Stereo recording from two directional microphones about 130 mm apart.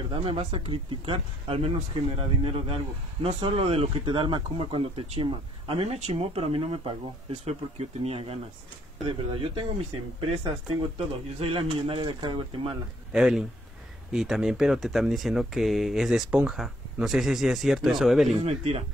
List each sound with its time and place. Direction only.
0.1 s speech: 45° right (ahead or behind)
5.9 s speech: 55° right (ahead or behind)
11.3 s speech: 45° right (ahead or behind)
13.1 s speech: 5° right (ahead or behind)
18.3 s speech: 55° right (ahead or behind)